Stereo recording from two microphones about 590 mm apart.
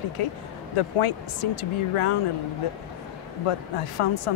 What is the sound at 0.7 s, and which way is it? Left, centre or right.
Speech, left.